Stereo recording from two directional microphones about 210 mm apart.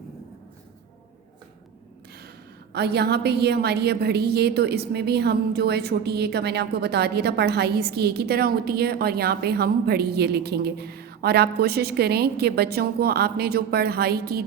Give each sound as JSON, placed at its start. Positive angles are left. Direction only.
{"t": 2.7, "sound": "a woman's voice", "side_deg": -50}